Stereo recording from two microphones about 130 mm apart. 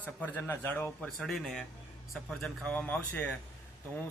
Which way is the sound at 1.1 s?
5° left (ahead or behind).